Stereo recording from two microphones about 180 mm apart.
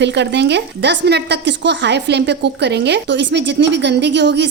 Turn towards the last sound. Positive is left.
turn(degrees=-75)  # may be behind; listen again after turning